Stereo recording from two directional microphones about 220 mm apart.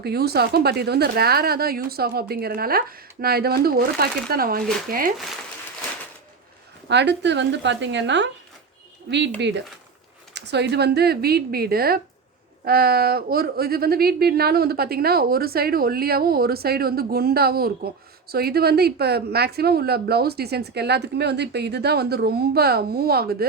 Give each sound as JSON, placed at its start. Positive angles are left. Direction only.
{"t": 0.0, "sound": "a woman's voice", "side_deg": -45}
{"t": 6.8, "sound": "a woman's voice", "side_deg": -50}
{"t": 10.3, "sound": "a woman's voice", "side_deg": -50}